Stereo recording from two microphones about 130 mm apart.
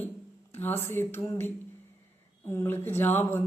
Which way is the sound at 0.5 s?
15° left (ahead or behind).